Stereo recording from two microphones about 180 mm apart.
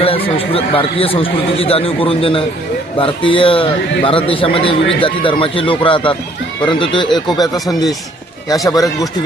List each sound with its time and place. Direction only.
0.0 s a man's voice: 30° left (ahead or behind)